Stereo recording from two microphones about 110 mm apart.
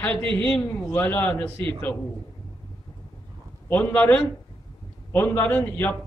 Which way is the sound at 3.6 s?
15° left (ahead or behind).